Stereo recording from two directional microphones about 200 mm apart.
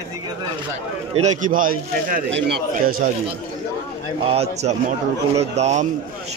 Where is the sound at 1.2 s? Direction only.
40° right (ahead or behind).